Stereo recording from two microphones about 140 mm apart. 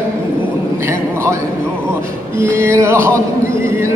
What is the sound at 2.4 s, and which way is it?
Music, 20° right (ahead or behind).